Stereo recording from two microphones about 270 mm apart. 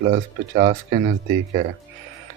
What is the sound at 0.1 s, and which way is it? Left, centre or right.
Speech, right.